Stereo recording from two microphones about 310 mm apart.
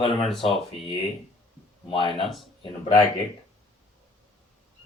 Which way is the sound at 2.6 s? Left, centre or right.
Centre.